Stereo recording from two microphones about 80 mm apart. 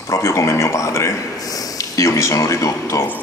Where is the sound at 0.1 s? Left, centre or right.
Left.